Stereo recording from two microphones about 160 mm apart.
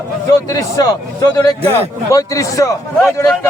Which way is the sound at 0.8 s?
20° left (ahead or behind).